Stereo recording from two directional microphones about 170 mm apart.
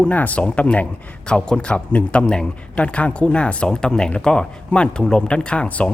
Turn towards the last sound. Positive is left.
turn(degrees=5)  # may be behind; listen again after turning